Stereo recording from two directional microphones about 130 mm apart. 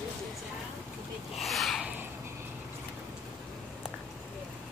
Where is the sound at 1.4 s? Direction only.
Centre (ahead or behind).